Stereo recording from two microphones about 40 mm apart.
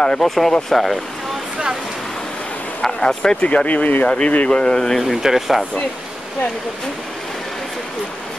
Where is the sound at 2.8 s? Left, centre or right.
Centre.